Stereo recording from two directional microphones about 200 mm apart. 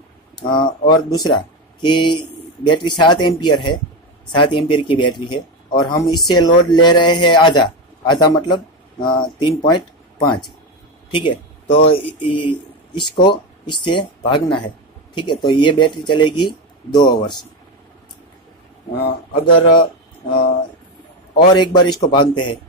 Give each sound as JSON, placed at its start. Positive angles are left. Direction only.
{"t": 0.5, "sound": "speech", "side_deg": 20}
{"t": 19.4, "sound": "speech", "side_deg": 25}
{"t": 21.4, "sound": "speech", "side_deg": 20}